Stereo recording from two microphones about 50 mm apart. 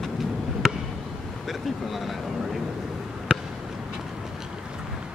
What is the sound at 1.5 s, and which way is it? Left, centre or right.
Speech, centre.